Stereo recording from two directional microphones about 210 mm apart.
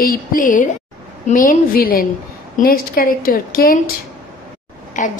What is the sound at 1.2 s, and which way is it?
A woman's voice, 40° left (ahead or behind).